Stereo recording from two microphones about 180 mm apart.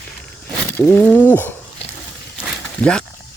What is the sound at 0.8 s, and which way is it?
Speech, 10° left (ahead or behind).